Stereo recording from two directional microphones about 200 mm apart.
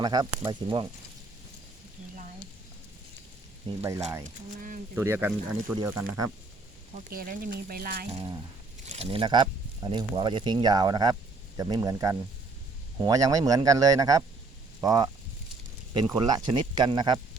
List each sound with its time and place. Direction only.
0.0 s speech: 20° right (ahead or behind)
4.9 s a man's voice: 10° right (ahead or behind)
7.1 s speech: 45° right (ahead or behind)
8.9 s a man's voice: 30° right (ahead or behind)